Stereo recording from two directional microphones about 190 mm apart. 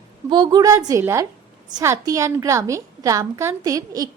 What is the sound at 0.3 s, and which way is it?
A woman's voice, 25° right (ahead or behind).